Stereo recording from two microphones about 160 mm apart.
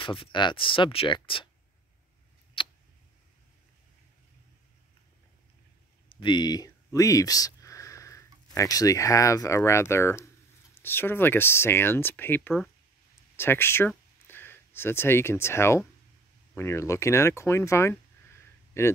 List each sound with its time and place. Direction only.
0.0 s speech: 30° left (ahead or behind)
2.6 s tick: 30° left (ahead or behind)
6.1 s speech: 30° left (ahead or behind)